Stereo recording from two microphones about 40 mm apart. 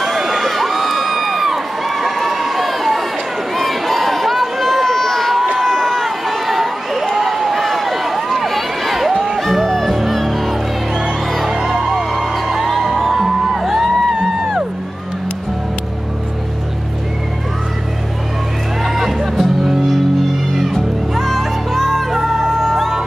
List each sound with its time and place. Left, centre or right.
0.0 s crowd: centre
3.5 s a sound: centre
5.6 s crowd: centre
9.1 s music: centre
9.4 s music: centre
18.8 s music: centre
21.2 s music: centre